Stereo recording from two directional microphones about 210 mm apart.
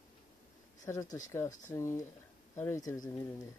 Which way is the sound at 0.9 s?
15° left (ahead or behind).